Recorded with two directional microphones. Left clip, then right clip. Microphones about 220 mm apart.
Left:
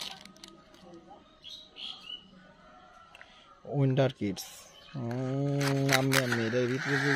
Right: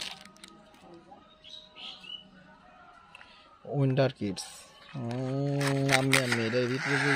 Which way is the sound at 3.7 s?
Centre (ahead or behind).